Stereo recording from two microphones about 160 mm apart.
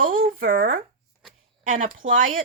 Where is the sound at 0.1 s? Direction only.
60° right (ahead or behind).